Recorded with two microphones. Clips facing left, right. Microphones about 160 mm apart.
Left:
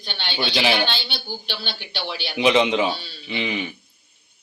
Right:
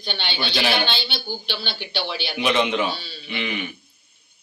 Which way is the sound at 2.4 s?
20° left (ahead or behind).